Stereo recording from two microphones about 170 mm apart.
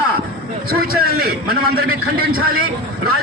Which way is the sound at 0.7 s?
60° right (ahead or behind).